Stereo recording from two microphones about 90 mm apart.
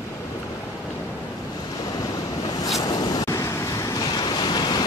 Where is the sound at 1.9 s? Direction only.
45° left (ahead or behind).